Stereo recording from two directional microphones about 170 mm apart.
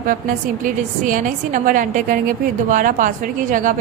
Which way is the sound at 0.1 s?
55° right (ahead or behind).